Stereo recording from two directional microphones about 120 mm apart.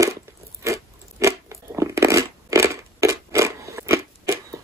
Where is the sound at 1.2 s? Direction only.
25° right (ahead or behind).